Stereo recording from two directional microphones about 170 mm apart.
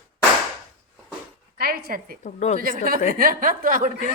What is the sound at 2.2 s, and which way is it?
Speech, 45° left (ahead or behind).